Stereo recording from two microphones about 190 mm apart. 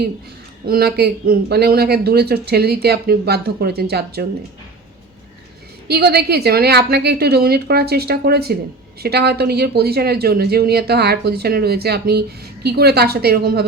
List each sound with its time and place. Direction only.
0.6 s speech: 50° right (ahead or behind)
5.9 s speech: 60° right (ahead or behind)